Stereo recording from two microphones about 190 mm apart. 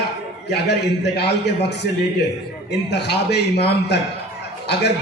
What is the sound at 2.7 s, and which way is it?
A man's voice, 60° left (ahead or behind).